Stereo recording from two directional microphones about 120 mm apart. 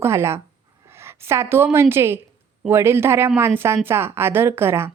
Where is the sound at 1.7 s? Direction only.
20° right (ahead or behind).